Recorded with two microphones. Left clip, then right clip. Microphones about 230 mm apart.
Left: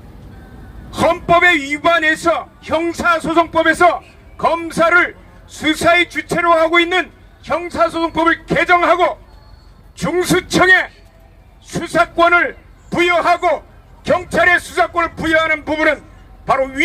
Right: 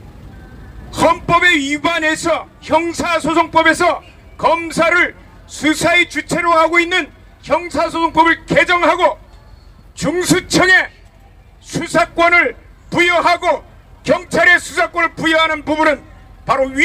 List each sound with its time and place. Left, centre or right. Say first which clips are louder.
0.9 s a man's voice: even; right